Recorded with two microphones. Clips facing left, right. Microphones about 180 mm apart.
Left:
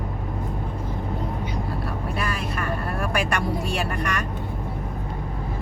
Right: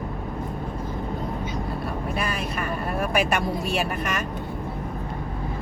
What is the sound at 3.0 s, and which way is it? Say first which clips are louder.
Speech: right 3 dB; 20° right (ahead or behind).